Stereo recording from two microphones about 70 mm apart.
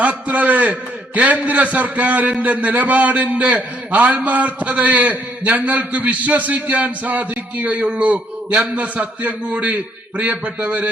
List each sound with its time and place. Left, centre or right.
0.0 s a man's voice: right